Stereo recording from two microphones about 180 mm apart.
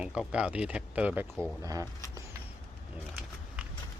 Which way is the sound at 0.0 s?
5° right (ahead or behind).